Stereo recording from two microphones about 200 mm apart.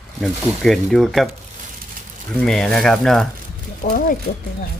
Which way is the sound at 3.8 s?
40° left (ahead or behind).